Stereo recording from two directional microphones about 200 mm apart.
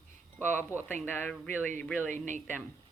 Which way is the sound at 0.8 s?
10° left (ahead or behind).